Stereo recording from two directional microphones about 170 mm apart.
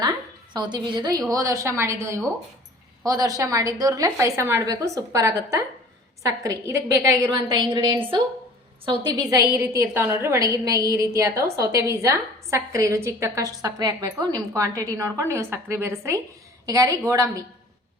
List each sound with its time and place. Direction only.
0.5 s a woman's voice: 25° right (ahead or behind)